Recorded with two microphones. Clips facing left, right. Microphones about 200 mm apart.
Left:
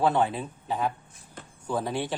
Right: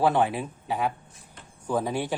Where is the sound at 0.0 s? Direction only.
15° right (ahead or behind).